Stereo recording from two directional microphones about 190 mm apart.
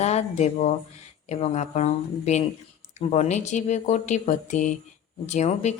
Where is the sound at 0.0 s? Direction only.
35° left (ahead or behind).